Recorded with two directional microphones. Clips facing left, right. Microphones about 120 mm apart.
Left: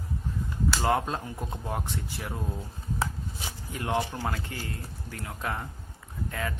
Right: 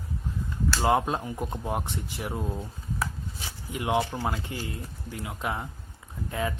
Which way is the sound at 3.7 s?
15° right (ahead or behind).